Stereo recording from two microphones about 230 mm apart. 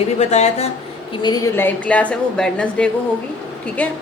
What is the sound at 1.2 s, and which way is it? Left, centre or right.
A woman's voice, centre.